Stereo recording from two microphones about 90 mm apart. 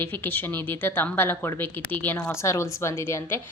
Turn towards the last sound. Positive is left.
turn(degrees=30)  # may be behind; listen again after turning